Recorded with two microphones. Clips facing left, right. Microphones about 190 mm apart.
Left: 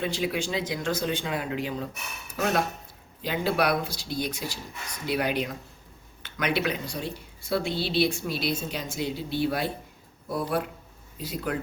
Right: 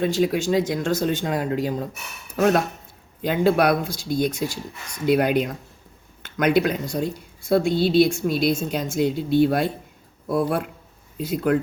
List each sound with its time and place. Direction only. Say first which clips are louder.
0.0 s a woman's voice: right 8 dB; 45° right (ahead or behind)